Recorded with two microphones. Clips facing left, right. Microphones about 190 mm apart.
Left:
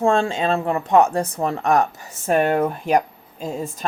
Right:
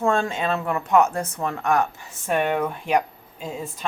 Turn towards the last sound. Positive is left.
turn(degrees=40)  # may be behind; listen again after turning